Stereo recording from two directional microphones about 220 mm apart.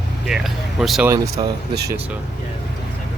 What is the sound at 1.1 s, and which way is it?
Speech, 15° right (ahead or behind).